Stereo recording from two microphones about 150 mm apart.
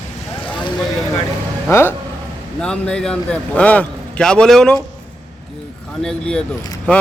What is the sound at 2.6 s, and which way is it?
A man's voice, 5° left (ahead or behind).